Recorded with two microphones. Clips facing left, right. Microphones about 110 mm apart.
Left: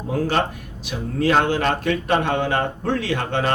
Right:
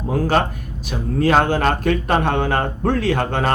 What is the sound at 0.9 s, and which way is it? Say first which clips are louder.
A man's voice: right 3 dB; 45° right (ahead or behind).